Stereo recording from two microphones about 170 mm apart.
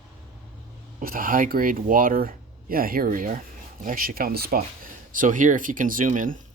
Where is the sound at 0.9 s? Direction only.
55° right (ahead or behind).